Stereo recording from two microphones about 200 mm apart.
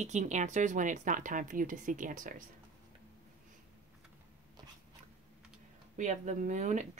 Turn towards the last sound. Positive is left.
turn(degrees=-35)  # may be behind; listen again after turning